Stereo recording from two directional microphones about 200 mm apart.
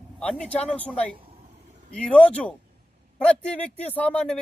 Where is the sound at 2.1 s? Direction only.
5° left (ahead or behind).